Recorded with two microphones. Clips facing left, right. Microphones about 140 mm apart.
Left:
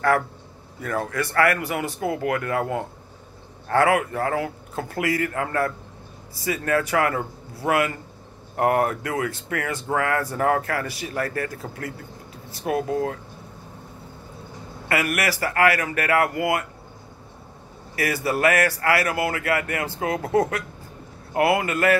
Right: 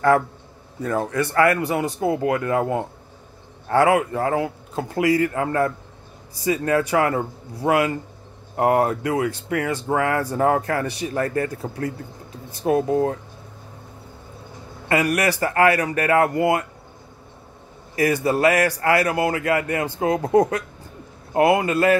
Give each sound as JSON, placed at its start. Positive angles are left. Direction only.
{"t": 0.7, "sound": "a man's voice", "side_deg": -20}
{"t": 14.9, "sound": "a man's voice", "side_deg": -20}
{"t": 17.9, "sound": "a man's voice", "side_deg": -20}